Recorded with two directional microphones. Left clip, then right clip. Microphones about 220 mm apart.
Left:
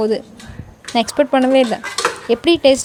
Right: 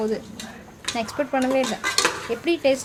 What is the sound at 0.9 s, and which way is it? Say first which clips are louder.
Speech: left 10 dB; 35° left (ahead or behind).